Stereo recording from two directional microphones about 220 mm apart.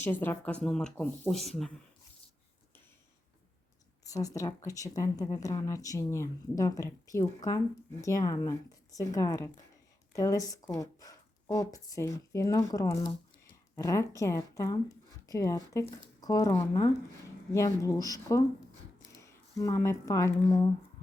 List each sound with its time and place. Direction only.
0.0 s speech: 10° left (ahead or behind)
4.1 s speech: 15° left (ahead or behind)